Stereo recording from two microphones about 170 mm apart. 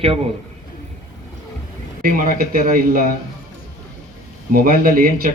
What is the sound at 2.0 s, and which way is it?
Speech, 55° right (ahead or behind).